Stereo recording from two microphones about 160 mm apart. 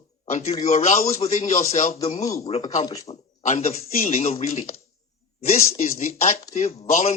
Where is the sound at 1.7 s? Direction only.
50° left (ahead or behind).